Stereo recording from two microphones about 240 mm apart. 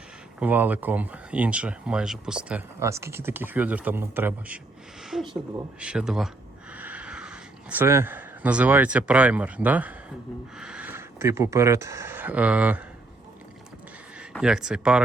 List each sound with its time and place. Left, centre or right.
0.3 s speech: centre
5.8 s speech: centre
14.2 s speech: centre